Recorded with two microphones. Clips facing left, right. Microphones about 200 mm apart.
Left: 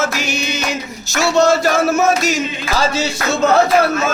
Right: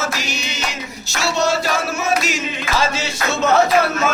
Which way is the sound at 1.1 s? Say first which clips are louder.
Left 6 dB; 45° left (ahead or behind).